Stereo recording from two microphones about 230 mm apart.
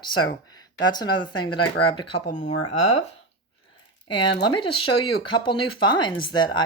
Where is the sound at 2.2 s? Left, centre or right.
Left.